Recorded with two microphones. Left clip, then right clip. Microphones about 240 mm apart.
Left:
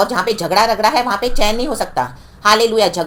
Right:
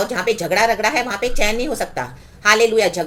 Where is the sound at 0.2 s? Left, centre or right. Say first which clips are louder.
Left 3 dB; centre.